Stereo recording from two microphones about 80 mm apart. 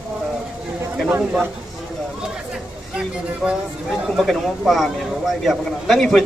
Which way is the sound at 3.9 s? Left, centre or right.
Centre.